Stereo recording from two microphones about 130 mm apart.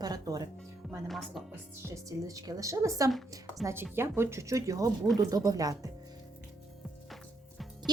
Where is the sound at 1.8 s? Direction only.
25° right (ahead or behind).